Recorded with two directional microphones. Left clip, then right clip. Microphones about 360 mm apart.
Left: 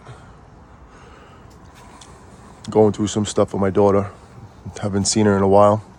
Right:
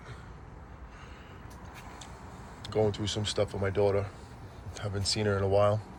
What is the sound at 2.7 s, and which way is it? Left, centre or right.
Speech, left.